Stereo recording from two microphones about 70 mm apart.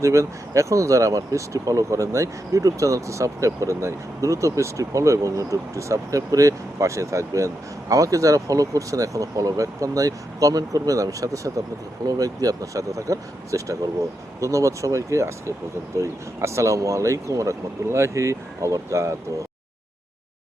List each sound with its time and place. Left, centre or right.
0.0 s speech: right